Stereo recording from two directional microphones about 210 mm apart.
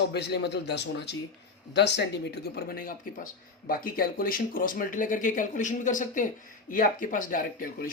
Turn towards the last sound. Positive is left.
turn(degrees=40)  # may be behind; listen again after turning